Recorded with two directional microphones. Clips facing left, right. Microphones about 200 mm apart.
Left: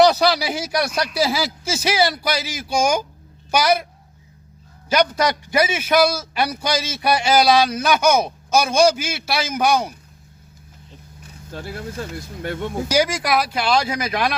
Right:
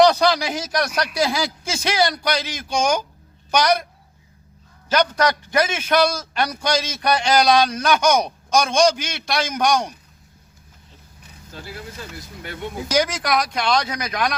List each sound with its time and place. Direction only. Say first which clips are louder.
0.0 s a man's voice: even; 10° left (ahead or behind)
4.9 s a man's voice: left 1 dB; 10° left (ahead or behind)
11.5 s speech: left 6 dB; 50° left (ahead or behind)
12.9 s a man's voice: left 1 dB; 10° left (ahead or behind)